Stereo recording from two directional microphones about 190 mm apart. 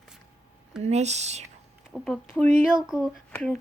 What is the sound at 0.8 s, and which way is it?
Speech, 35° right (ahead or behind).